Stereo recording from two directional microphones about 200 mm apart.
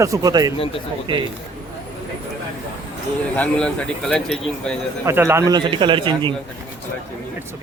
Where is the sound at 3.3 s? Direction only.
5° left (ahead or behind).